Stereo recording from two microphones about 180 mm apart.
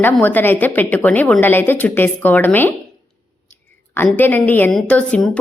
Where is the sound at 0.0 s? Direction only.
10° left (ahead or behind).